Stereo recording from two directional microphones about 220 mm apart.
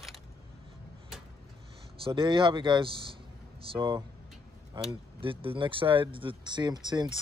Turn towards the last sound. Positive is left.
turn(degrees=-20)  # may be behind; listen again after turning